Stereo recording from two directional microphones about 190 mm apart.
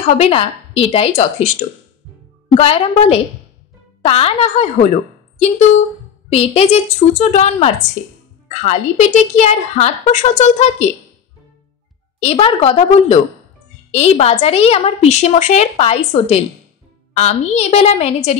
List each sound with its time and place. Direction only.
0.0 s a woman's voice: 35° left (ahead or behind)
2.5 s a woman's voice: 30° left (ahead or behind)
6.3 s a woman's voice: 35° left (ahead or behind)
12.2 s a woman's voice: 30° left (ahead or behind)